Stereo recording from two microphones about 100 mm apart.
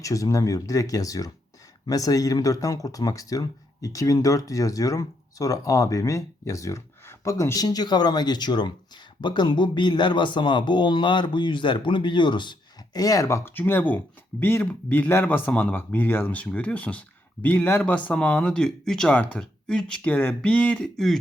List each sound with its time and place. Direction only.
0.0 s speech: 35° left (ahead or behind); by 20.0 s 5° left (ahead or behind)
20.1 s speech: 15° left (ahead or behind)